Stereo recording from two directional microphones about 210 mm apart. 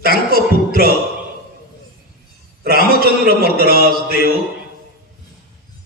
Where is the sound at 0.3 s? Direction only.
45° right (ahead or behind).